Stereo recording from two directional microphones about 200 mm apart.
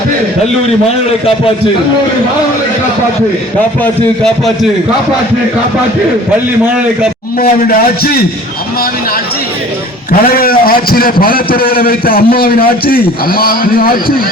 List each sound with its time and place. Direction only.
3.8 s speech: 5° left (ahead or behind)
7.3 s a man's voice: 45° left (ahead or behind)
10.1 s a man's voice: 45° left (ahead or behind)